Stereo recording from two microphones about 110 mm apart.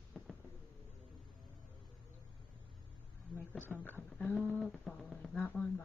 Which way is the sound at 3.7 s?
15° left (ahead or behind).